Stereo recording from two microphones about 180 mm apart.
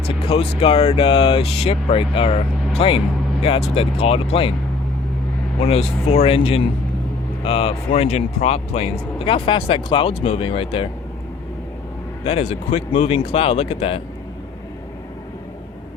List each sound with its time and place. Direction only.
0.1 s speech: 30° left (ahead or behind)
5.5 s speech: 35° left (ahead or behind)
12.2 s speech: 35° left (ahead or behind)